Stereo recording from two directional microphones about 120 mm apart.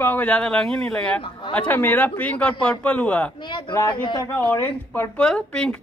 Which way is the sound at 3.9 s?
40° left (ahead or behind).